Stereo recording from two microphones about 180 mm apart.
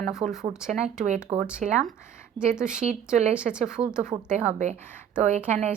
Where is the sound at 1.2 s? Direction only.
10° right (ahead or behind).